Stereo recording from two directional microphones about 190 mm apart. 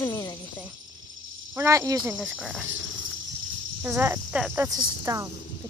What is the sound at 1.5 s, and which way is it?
Speech, 15° right (ahead or behind).